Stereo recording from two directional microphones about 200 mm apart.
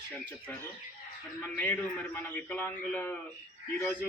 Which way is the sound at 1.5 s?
10° left (ahead or behind).